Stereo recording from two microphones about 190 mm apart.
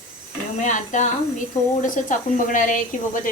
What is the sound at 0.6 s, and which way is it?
A woman's voice, 40° left (ahead or behind).